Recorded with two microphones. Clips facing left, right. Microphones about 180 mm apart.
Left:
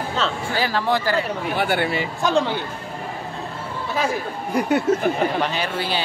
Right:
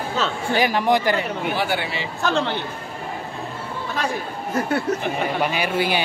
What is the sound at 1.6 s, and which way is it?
Speech, 50° left (ahead or behind).